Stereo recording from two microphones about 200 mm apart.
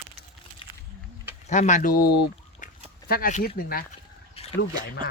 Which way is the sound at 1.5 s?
40° left (ahead or behind).